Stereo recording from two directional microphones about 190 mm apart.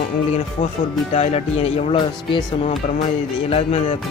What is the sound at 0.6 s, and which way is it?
Speech, 30° left (ahead or behind).